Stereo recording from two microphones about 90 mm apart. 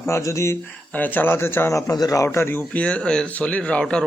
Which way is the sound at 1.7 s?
40° left (ahead or behind).